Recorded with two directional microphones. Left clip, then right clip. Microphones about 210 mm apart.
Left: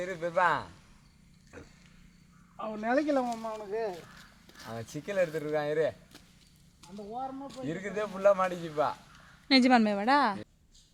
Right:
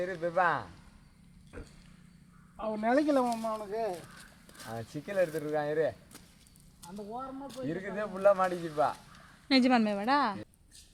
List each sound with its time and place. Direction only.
0.0 s speech: 55° left (ahead or behind)
1.5 s vehicle: 30° right (ahead or behind)
2.6 s speech: 20° right (ahead or behind)
3.2 s speech: 40° right (ahead or behind)
4.7 s speech: 55° left (ahead or behind)
6.8 s a sound: 40° right (ahead or behind)
7.7 s speech: 55° left (ahead or behind)
9.5 s a woman's voice: 20° left (ahead or behind)